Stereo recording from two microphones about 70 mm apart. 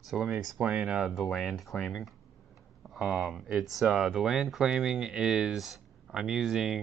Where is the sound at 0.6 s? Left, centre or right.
Centre.